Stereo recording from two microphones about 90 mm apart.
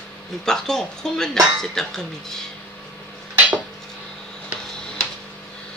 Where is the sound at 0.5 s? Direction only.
5° left (ahead or behind).